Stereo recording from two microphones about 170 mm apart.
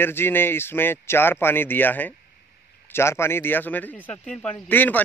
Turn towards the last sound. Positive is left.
turn(degrees=10)  # may be behind; listen again after turning